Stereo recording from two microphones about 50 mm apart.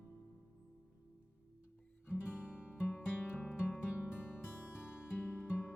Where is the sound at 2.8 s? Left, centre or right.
Left.